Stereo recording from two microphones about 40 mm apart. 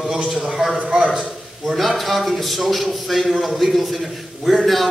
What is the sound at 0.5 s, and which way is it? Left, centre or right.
A man's voice, centre.